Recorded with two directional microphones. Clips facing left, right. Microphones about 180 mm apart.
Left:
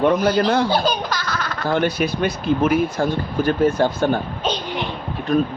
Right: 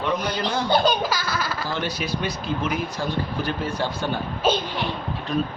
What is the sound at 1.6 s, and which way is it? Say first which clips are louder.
Speech: left 8 dB; 55° left (ahead or behind).